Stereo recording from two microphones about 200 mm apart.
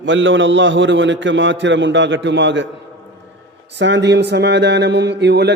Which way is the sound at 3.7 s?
60° right (ahead or behind).